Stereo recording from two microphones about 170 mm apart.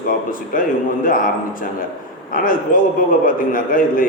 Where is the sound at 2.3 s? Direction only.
55° left (ahead or behind).